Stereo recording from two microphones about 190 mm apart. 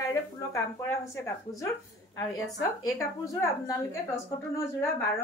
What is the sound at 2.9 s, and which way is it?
Speech, 15° left (ahead or behind).